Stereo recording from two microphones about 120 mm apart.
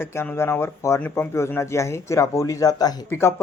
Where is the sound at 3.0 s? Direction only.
20° left (ahead or behind).